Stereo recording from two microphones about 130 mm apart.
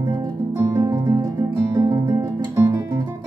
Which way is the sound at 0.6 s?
25° right (ahead or behind).